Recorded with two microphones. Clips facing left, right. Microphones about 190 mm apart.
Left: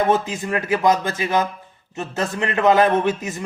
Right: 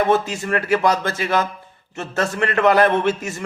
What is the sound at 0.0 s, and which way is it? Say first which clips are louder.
A man's voice: right 1 dB; 20° left (ahead or behind).